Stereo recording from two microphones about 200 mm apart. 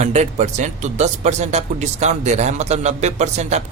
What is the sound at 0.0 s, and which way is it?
Speech, 35° right (ahead or behind).